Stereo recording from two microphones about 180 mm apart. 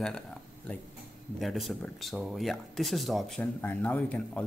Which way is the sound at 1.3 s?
Centre (ahead or behind).